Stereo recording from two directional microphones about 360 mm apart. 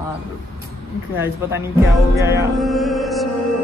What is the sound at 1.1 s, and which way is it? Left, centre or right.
Speech, centre.